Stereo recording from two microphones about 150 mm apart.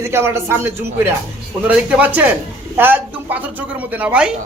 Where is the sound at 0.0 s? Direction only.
15° right (ahead or behind).